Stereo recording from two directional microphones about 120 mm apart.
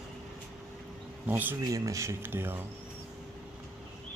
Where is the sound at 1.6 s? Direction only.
25° right (ahead or behind).